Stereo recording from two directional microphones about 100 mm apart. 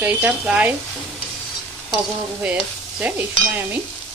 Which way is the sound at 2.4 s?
10° right (ahead or behind).